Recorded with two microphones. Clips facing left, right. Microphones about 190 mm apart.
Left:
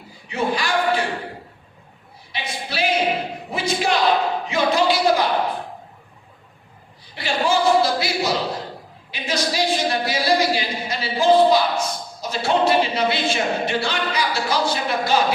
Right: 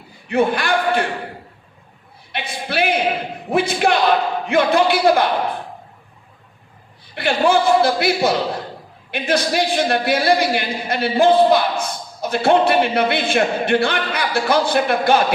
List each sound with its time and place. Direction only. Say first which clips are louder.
0.3 s a man's voice: right 5 dB; 55° right (ahead or behind)
2.3 s a man's voice: right 5 dB; 55° right (ahead or behind)
7.2 s a man's voice: right 4 dB; 55° right (ahead or behind)